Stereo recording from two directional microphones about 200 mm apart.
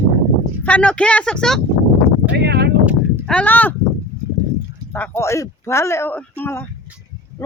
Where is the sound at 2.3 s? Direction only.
55° right (ahead or behind).